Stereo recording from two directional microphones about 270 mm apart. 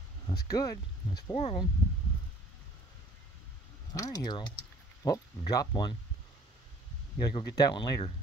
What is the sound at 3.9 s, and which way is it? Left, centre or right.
Speech, centre.